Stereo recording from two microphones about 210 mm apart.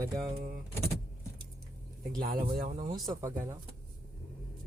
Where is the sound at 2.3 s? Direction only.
45° right (ahead or behind).